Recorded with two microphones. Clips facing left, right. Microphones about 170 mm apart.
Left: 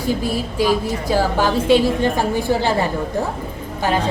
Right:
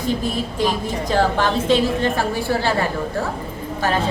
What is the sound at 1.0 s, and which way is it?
A woman's voice, 10° left (ahead or behind).